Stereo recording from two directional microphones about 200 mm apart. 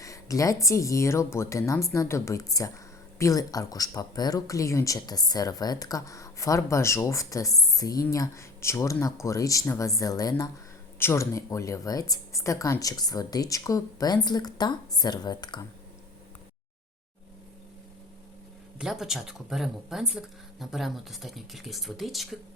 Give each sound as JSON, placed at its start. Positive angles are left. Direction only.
{"t": 0.0, "sound": "speech", "side_deg": 15}
{"t": 18.8, "sound": "speech", "side_deg": 0}